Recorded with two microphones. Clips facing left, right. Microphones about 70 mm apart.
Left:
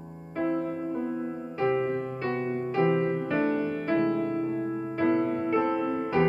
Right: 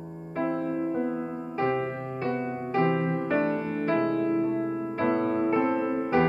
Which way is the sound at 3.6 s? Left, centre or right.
Right.